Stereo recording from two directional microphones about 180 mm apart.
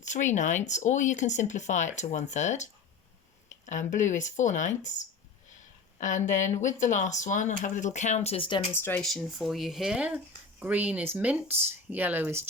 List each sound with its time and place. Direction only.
0.0 s speech: 40° left (ahead or behind)
3.9 s speech: 45° left (ahead or behind)
8.7 s speech: 10° left (ahead or behind); by 12.5 s 10° right (ahead or behind)